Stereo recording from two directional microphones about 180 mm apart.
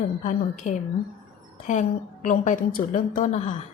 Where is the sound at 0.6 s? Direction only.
45° left (ahead or behind).